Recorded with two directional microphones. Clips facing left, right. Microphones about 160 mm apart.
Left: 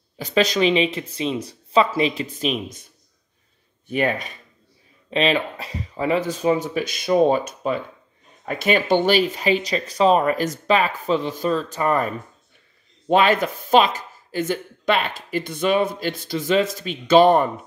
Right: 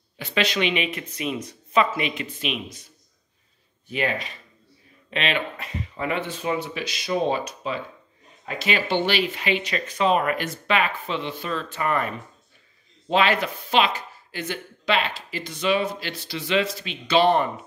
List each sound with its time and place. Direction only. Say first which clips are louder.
0.2 s speech: left 5 dB; 40° left (ahead or behind)
3.9 s speech: left 4 dB; 50° left (ahead or behind)
5.1 s speech: left 6 dB; 35° left (ahead or behind)